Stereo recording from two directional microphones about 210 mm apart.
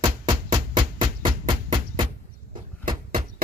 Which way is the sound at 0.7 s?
25° right (ahead or behind).